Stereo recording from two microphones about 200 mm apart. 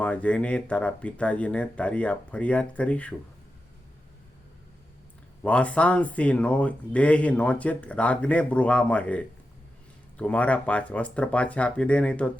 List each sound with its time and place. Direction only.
0.0 s speech: 5° left (ahead or behind)
5.4 s speech: 5° left (ahead or behind)